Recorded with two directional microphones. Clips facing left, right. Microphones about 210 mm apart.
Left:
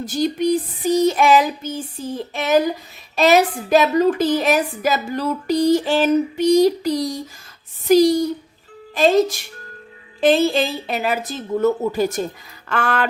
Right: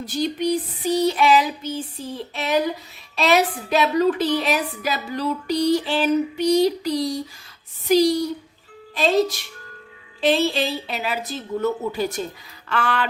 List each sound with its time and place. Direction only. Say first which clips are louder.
0.0 s a woman's voice: left 4 dB; 45° left (ahead or behind)